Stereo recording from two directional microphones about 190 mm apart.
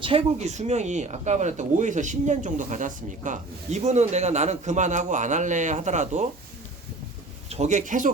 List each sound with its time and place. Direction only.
0.0 s speech: 30° right (ahead or behind)
7.5 s speech: 35° right (ahead or behind)